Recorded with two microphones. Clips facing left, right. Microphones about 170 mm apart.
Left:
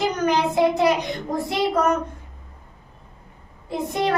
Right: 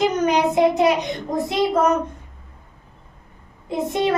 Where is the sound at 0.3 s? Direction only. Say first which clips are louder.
Right 2 dB; 20° right (ahead or behind).